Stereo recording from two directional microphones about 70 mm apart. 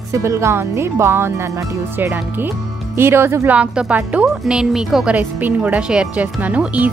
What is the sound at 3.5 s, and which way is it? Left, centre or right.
Speech, centre.